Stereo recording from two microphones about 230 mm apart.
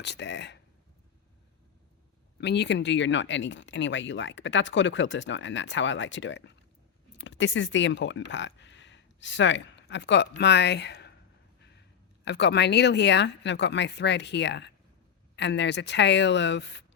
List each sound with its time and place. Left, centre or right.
0.0 s speech: left
2.4 s speech: left
12.2 s speech: left